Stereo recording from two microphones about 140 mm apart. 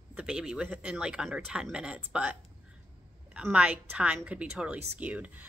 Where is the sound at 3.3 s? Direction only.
10° right (ahead or behind).